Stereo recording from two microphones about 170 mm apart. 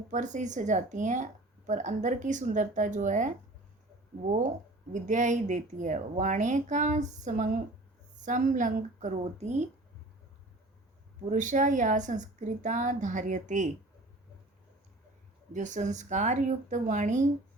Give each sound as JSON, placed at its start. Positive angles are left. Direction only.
{"t": 0.1, "sound": "a woman's voice", "side_deg": -45}
{"t": 4.4, "sound": "a woman's voice", "side_deg": -45}
{"t": 11.3, "sound": "a woman's voice", "side_deg": -50}
{"t": 15.5, "sound": "a woman's voice", "side_deg": -45}